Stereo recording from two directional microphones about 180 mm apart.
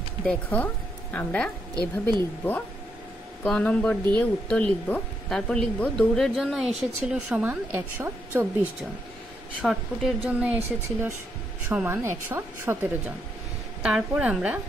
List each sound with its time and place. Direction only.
0.2 s a woman's voice: 5° left (ahead or behind)
1.8 s speech: 20° right (ahead or behind)
3.4 s a woman's voice: 5° left (ahead or behind); by 8.5 s 10° right (ahead or behind)
9.6 s a woman's voice: centre (ahead or behind)